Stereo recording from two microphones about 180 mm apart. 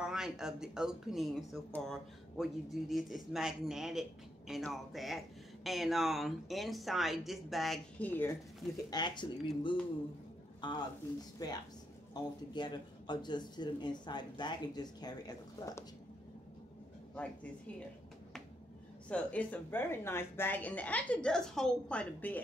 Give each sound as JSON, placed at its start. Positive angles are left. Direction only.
{"t": 0.0, "sound": "speech", "side_deg": -5}
{"t": 8.9, "sound": "speech", "side_deg": 25}
{"t": 17.1, "sound": "speech", "side_deg": 5}
{"t": 19.0, "sound": "speech", "side_deg": 5}